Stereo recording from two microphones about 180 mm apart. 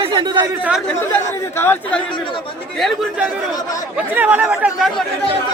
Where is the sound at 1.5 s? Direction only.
10° left (ahead or behind).